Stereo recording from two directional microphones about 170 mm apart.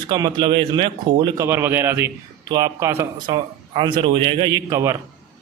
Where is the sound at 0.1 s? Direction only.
25° right (ahead or behind).